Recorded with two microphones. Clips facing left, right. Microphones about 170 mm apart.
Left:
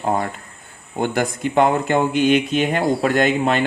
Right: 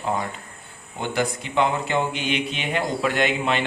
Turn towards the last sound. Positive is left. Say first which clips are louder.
# left 5 dB
turn(degrees=45)  # may be behind; listen again after turning